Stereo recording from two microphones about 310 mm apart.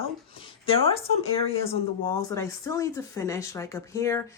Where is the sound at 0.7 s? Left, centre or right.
Centre.